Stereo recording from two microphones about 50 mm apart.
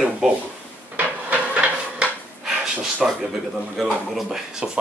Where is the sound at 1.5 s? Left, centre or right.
Right.